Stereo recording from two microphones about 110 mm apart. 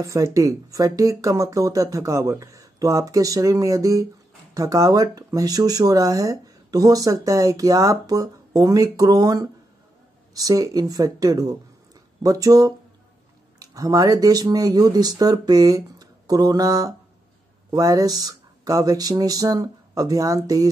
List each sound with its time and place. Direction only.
0.0 s speech: 30° right (ahead or behind)